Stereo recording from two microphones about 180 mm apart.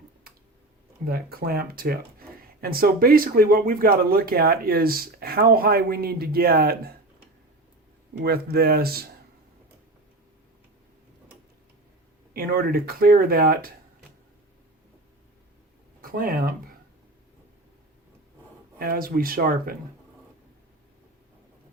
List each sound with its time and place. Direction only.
1.0 s speech: 55° right (ahead or behind)
8.2 s speech: 60° right (ahead or behind)
12.3 s speech: 55° right (ahead or behind)
16.0 s speech: 50° right (ahead or behind)
18.8 s speech: 55° right (ahead or behind)